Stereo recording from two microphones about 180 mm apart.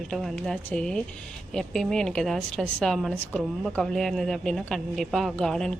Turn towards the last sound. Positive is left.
turn(degrees=5)  # may be behind; listen again after turning